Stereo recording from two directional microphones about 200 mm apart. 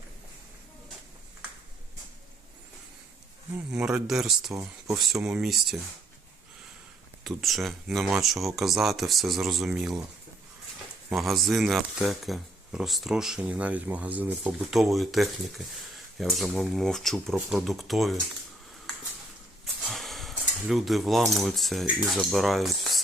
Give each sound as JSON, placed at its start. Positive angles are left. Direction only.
{"t": 3.7, "sound": "speech", "side_deg": -5}
{"t": 7.3, "sound": "speech", "side_deg": 0}
{"t": 11.1, "sound": "speech", "side_deg": 0}
{"t": 19.8, "sound": "speech", "side_deg": 0}